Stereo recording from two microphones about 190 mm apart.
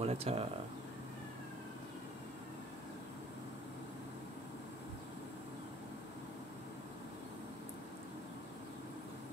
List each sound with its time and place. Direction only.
0.0 s speech: 35° right (ahead or behind)